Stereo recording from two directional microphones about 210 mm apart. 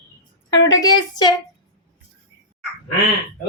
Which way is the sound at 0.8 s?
20° left (ahead or behind).